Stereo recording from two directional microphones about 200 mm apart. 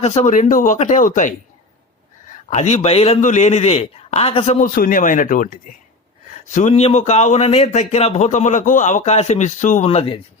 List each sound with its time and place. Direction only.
0.0 s speech: 35° left (ahead or behind)
2.3 s speech: 35° left (ahead or behind)
4.6 s speech: 45° left (ahead or behind)